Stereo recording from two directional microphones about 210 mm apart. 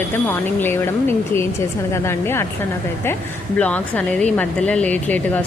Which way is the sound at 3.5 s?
5° left (ahead or behind).